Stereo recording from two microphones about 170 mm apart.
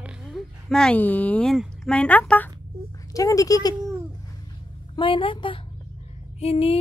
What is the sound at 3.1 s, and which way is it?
Speech, 20° left (ahead or behind).